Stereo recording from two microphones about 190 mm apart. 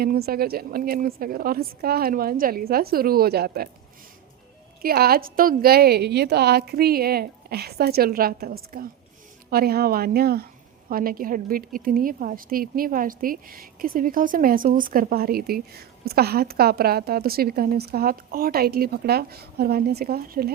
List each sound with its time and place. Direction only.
0.0 s a woman's voice: 55° right (ahead or behind)
4.8 s a woman's voice: 55° right (ahead or behind)